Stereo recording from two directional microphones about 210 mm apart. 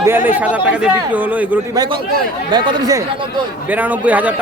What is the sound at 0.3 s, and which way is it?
Speech, 5° right (ahead or behind).